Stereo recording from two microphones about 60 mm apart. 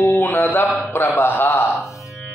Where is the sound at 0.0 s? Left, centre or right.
Left.